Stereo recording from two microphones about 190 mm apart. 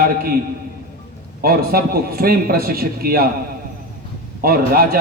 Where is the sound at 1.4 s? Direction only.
50° right (ahead or behind).